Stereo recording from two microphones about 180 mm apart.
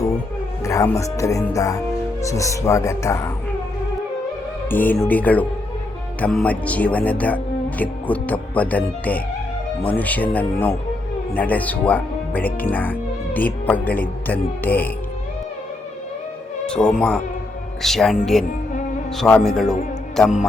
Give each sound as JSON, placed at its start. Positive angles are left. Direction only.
{"t": 0.6, "sound": "speech", "side_deg": 15}
{"t": 4.7, "sound": "speech", "side_deg": 10}
{"t": 16.6, "sound": "speech", "side_deg": 5}